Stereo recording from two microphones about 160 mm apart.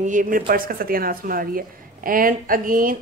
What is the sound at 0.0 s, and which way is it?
A woman's voice, 55° right (ahead or behind).